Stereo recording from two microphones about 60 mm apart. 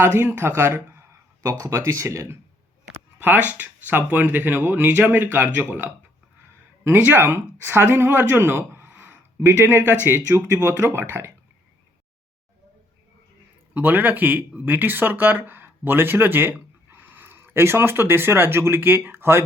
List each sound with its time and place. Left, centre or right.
0.0 s speech: right
3.2 s speech: right
13.7 s speech: right